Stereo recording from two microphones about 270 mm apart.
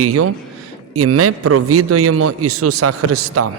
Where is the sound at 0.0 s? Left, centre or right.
Right.